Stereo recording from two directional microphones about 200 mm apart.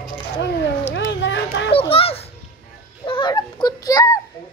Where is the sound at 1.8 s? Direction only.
30° left (ahead or behind).